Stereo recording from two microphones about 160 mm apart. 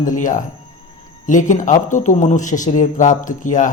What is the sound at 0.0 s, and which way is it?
A man's voice, 55° left (ahead or behind).